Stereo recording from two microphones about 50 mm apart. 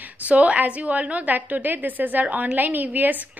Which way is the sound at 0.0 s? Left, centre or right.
Right.